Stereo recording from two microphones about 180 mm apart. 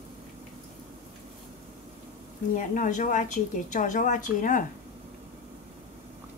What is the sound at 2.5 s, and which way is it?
A woman's voice, 45° left (ahead or behind).